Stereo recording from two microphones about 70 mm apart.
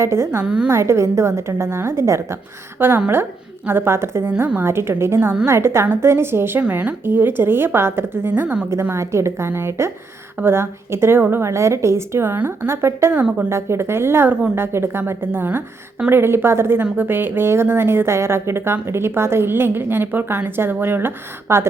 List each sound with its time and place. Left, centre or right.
0.0 s a woman's voice: right
0.4 s a woman's voice: centre
0.7 s a woman's voice: right
2.7 s a woman's voice: right
6.6 s a woman's voice: right
11.4 s a woman's voice: right